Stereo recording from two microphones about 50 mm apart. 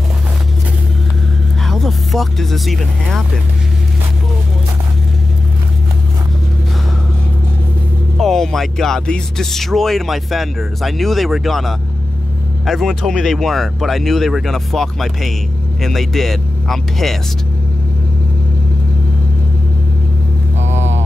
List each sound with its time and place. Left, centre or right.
1.7 s speech: centre
8.2 s speech: centre